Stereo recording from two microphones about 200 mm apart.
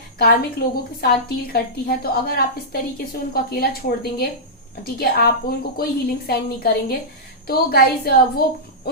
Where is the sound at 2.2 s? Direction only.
50° left (ahead or behind).